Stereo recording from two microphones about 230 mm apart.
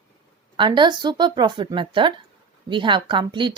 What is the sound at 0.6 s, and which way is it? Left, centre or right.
Speech, centre.